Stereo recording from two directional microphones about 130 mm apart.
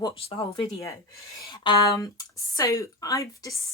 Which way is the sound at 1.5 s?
35° left (ahead or behind).